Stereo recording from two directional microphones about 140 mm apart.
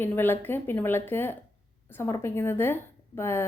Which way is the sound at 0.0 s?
15° left (ahead or behind).